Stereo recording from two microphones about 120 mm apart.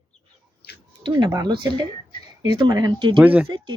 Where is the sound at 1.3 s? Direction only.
35° right (ahead or behind).